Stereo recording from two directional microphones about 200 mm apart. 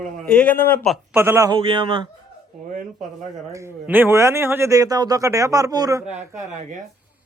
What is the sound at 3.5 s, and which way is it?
A man's voice, 10° right (ahead or behind).